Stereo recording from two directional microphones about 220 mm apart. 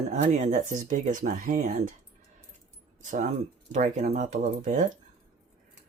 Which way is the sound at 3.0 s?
35° right (ahead or behind).